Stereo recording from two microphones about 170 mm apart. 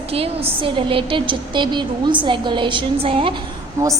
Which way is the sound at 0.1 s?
35° right (ahead or behind).